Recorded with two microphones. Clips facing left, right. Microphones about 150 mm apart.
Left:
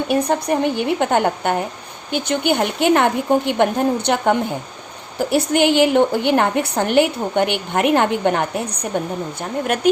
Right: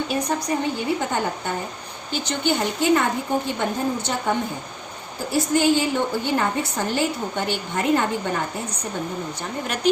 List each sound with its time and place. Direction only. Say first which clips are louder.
0.1 s a woman's voice: left 6 dB; 60° left (ahead or behind)
9.8 s speech: left 3 dB; 55° left (ahead or behind)